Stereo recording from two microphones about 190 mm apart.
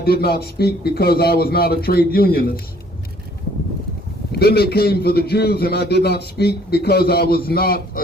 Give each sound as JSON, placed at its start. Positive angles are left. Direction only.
{"t": 0.0, "sound": "a man's voice", "side_deg": 55}
{"t": 4.3, "sound": "a man's voice", "side_deg": 55}